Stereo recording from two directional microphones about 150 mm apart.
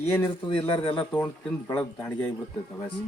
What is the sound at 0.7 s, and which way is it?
Speech, 35° left (ahead or behind).